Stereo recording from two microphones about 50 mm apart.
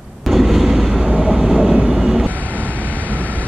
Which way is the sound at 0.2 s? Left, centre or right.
Centre.